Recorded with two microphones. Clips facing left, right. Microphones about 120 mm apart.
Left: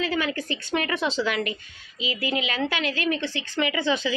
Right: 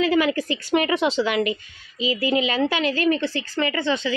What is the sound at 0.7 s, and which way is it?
Speech, 25° right (ahead or behind).